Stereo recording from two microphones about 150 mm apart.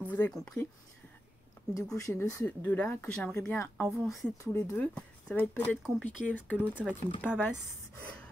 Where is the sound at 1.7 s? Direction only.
20° left (ahead or behind).